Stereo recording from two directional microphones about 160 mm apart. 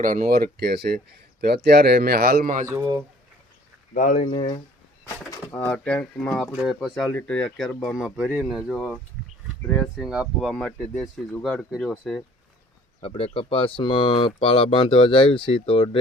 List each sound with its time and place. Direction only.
0.0 s speech: 60° right (ahead or behind)
3.9 s speech: 55° left (ahead or behind); by 4.6 s 35° left (ahead or behind)
5.0 s speech: 10° left (ahead or behind)
7.9 s speech: 5° right (ahead or behind)
13.0 s speech: 35° left (ahead or behind)